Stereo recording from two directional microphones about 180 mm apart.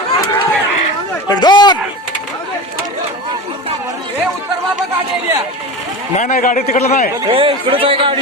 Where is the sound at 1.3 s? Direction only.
25° left (ahead or behind).